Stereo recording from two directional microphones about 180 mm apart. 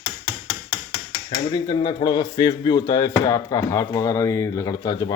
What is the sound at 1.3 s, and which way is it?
Speech, 25° left (ahead or behind).